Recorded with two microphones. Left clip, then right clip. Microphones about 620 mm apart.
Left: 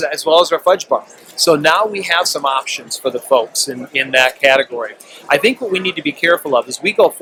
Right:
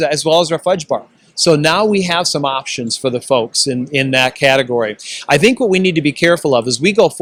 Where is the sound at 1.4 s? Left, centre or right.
Right.